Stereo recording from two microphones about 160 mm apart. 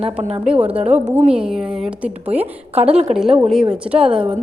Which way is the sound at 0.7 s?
40° right (ahead or behind).